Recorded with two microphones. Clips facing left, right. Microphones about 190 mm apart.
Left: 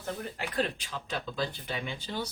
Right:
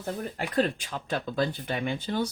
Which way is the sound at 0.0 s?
45° right (ahead or behind).